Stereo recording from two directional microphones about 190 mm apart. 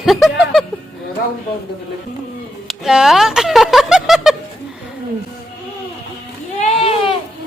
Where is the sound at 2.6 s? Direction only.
Centre (ahead or behind).